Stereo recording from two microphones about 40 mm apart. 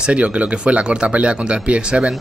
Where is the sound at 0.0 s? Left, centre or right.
Right.